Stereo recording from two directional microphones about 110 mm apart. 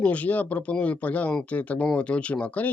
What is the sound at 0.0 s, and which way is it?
Speech, 15° left (ahead or behind).